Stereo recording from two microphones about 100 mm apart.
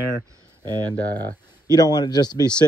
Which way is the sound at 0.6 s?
45° right (ahead or behind).